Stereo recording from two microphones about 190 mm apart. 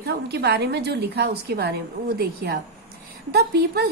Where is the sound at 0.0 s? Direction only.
60° right (ahead or behind).